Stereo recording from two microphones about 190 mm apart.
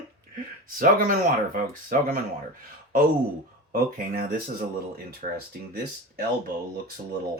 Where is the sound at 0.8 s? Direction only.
45° right (ahead or behind).